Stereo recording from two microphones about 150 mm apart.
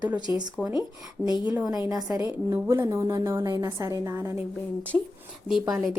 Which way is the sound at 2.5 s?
20° right (ahead or behind).